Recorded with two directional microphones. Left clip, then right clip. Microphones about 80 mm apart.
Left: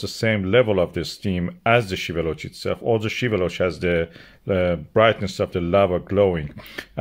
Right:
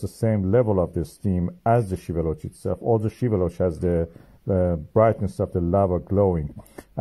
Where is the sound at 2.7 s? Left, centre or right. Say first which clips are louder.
Left 1 dB; left.